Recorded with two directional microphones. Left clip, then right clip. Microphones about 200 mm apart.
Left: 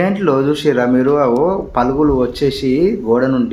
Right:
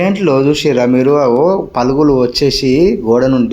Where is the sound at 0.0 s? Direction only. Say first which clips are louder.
Right 3 dB; 25° right (ahead or behind).